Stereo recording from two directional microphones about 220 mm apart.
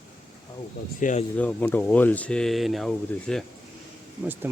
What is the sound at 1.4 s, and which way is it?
Speech, 5° left (ahead or behind).